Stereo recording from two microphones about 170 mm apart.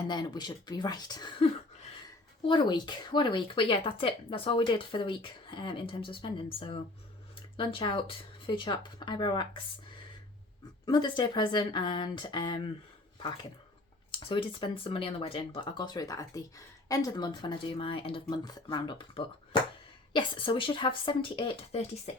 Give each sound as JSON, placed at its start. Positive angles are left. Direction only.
{"t": 0.1, "sound": "speech", "side_deg": 25}
{"t": 2.5, "sound": "speech", "side_deg": 25}
{"t": 10.8, "sound": "speech", "side_deg": 25}
{"t": 14.3, "sound": "speech", "side_deg": 30}